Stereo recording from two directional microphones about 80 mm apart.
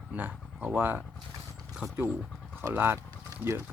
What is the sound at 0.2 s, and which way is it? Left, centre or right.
Speech, centre.